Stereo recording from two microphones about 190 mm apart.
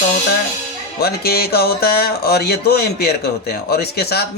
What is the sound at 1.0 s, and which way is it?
Speech, 55° left (ahead or behind).